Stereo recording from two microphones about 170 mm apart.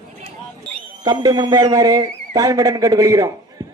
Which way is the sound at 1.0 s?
25° right (ahead or behind).